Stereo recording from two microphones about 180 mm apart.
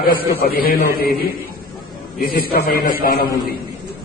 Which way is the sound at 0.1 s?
55° left (ahead or behind).